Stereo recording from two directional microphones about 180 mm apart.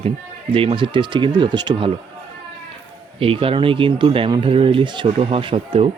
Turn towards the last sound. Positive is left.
turn(degrees=-30)  # may be behind; listen again after turning